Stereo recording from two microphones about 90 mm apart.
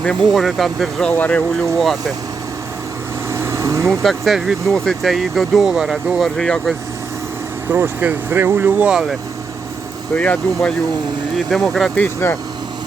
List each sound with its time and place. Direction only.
0.0 s speech: 5° left (ahead or behind)
1.0 s speech: 15° left (ahead or behind)
1.8 s speech: centre (ahead or behind)
3.3 s vehicle: 35° right (ahead or behind)
3.8 s speech: centre (ahead or behind)
7.7 s speech: 25° right (ahead or behind)
10.2 s speech: 15° left (ahead or behind)
11.5 s speech: 5° left (ahead or behind)
11.9 s speech: 25° left (ahead or behind)